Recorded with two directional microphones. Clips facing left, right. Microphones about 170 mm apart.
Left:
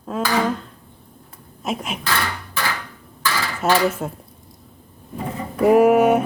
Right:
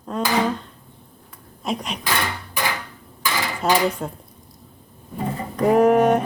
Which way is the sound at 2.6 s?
15° right (ahead or behind).